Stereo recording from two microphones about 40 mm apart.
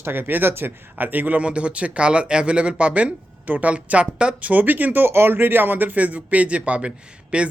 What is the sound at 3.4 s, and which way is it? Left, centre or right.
Speech, right.